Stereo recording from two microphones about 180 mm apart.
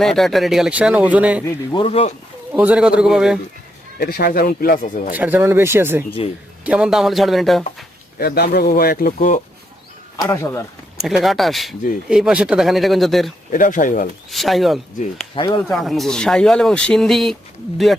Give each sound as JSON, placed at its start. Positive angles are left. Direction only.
{"t": 0.0, "sound": "speech", "side_deg": 0}
{"t": 1.7, "sound": "speech", "side_deg": 30}
{"t": 2.5, "sound": "speech", "side_deg": -5}
{"t": 3.9, "sound": "speech", "side_deg": 60}
{"t": 5.1, "sound": "speech", "side_deg": -10}
{"t": 6.2, "sound": "speech", "side_deg": 30}
{"t": 6.7, "sound": "speech", "side_deg": -5}
{"t": 8.2, "sound": "speech", "side_deg": 60}
{"t": 10.2, "sound": "speech", "side_deg": 15}
{"t": 11.2, "sound": "speech", "side_deg": 0}
{"t": 13.5, "sound": "speech", "side_deg": 45}
{"t": 14.3, "sound": "speech", "side_deg": 0}
{"t": 15.4, "sound": "speech", "side_deg": 25}
{"t": 15.6, "sound": "speech", "side_deg": 0}